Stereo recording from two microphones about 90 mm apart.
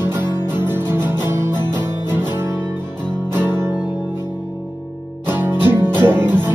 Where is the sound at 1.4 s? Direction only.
55° left (ahead or behind).